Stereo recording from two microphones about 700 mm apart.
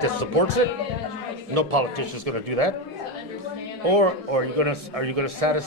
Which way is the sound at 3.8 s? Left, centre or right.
Right.